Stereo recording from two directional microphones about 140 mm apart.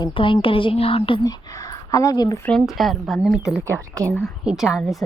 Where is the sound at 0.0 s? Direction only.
40° left (ahead or behind).